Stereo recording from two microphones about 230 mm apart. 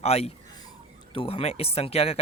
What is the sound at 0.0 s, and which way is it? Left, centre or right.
Speech, left.